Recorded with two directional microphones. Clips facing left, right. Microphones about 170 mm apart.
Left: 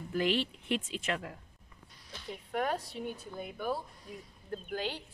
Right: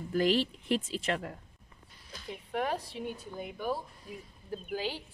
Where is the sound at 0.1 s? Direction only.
40° right (ahead or behind).